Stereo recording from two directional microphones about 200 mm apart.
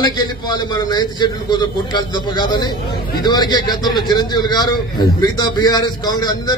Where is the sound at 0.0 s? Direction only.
20° left (ahead or behind).